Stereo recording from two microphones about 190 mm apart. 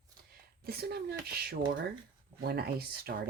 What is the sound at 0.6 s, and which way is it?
Speech, 55° right (ahead or behind).